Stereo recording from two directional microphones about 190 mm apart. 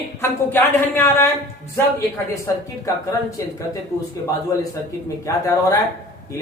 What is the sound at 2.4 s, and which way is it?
A woman's voice, 15° left (ahead or behind).